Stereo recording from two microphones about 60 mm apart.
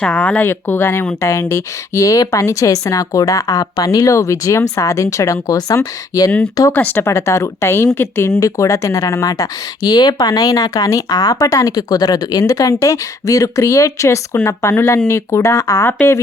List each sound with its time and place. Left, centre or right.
0.0 s speech: centre
0.4 s a woman's voice: left
6.7 s speech: left
7.0 s speech: left
8.4 s speech: left
15.4 s a woman's voice: left